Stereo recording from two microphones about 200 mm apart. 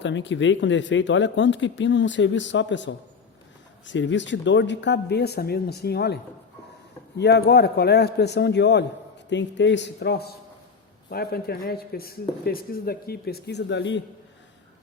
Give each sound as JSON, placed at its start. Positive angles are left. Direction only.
{"t": 0.0, "sound": "speech", "side_deg": 65}
{"t": 7.2, "sound": "speech", "side_deg": 55}